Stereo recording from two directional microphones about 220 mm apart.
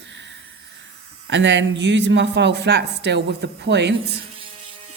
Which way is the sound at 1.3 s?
55° right (ahead or behind).